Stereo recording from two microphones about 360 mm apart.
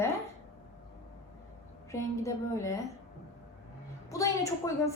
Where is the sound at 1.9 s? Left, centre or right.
Centre.